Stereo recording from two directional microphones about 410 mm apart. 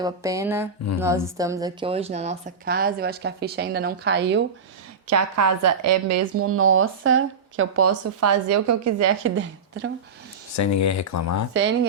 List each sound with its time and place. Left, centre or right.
0.0 s a sound: centre
0.9 s a woman's voice: centre; by 4.4 s right
5.0 s speech: right
10.6 s speech: left